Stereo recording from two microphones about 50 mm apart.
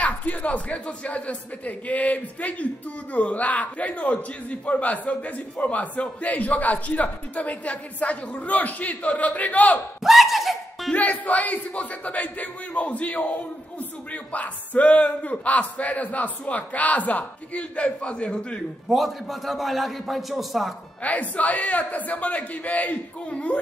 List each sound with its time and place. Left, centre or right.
0.0 s speech: left
10.0 s a sound: centre
10.9 s speech: left
18.9 s a man's voice: centre
21.0 s a man's voice: left